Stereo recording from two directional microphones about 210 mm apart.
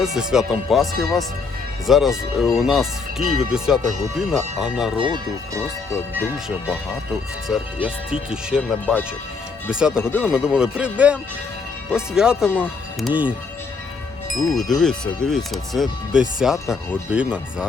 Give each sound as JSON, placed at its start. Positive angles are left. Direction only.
{"t": 0.0, "sound": "speech", "side_deg": -5}
{"t": 4.9, "sound": "speech", "side_deg": -20}
{"t": 6.1, "sound": "speech", "side_deg": -5}
{"t": 10.0, "sound": "speech", "side_deg": 10}
{"t": 10.2, "sound": "speech", "side_deg": -5}
{"t": 14.3, "sound": "speech", "side_deg": 0}